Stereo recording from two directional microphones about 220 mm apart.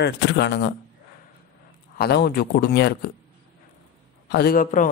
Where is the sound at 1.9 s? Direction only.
45° left (ahead or behind).